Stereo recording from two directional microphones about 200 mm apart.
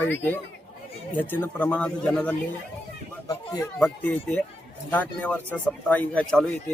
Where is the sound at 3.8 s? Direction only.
5° left (ahead or behind).